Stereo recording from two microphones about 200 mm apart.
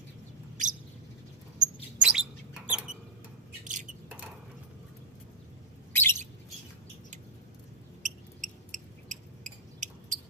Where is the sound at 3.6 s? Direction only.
40° right (ahead or behind).